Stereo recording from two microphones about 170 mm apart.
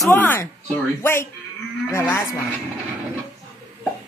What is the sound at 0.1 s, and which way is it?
Speech, 15° left (ahead or behind).